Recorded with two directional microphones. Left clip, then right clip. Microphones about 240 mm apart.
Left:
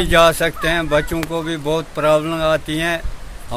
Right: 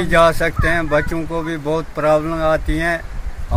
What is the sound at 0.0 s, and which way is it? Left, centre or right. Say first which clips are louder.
Speech: even; centre.